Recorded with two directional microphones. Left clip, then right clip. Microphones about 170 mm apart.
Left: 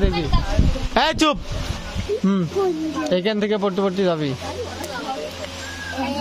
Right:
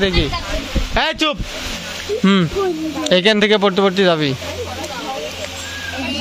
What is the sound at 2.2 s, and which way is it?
Speech, 5° right (ahead or behind).